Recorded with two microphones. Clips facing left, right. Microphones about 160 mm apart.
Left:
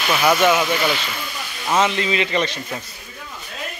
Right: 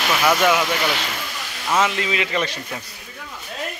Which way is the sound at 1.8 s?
5° right (ahead or behind).